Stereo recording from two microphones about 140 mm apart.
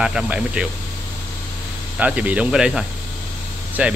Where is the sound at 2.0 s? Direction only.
10° right (ahead or behind).